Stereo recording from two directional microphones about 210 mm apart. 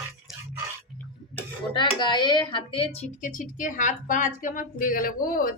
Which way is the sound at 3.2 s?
40° left (ahead or behind).